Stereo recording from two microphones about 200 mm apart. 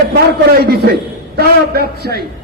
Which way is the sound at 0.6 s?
50° right (ahead or behind).